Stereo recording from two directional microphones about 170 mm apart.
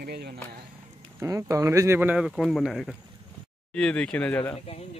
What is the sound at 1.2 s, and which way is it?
Speech, 15° right (ahead or behind).